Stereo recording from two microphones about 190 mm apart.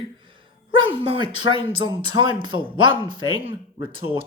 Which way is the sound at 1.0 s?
25° right (ahead or behind).